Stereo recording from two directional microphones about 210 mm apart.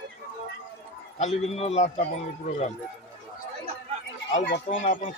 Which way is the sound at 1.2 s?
30° left (ahead or behind).